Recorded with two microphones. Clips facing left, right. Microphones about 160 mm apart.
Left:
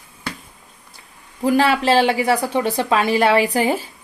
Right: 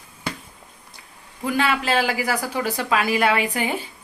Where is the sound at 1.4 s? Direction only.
35° left (ahead or behind).